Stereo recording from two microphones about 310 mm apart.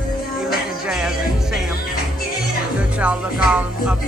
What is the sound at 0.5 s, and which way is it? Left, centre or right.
Music, centre.